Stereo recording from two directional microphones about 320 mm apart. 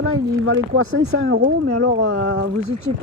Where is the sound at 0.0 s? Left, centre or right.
Right.